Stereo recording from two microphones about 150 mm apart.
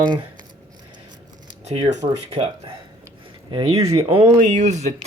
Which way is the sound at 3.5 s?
35° right (ahead or behind).